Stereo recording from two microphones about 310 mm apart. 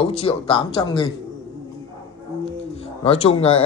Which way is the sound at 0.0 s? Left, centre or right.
Centre.